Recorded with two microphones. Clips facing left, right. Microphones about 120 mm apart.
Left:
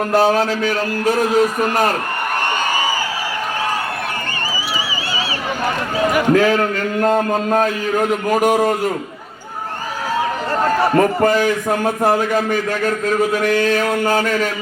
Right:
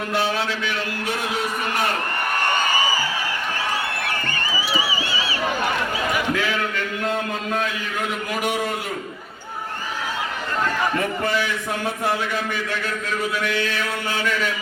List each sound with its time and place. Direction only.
0.1 s a man's voice: 40° left (ahead or behind)
6.0 s a man's voice: 45° left (ahead or behind)
10.6 s a man's voice: 40° left (ahead or behind)